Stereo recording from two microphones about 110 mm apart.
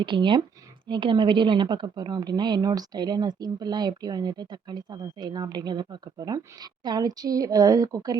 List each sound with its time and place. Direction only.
0.0 s a woman's voice: 50° right (ahead or behind); by 8.2 s 30° right (ahead or behind)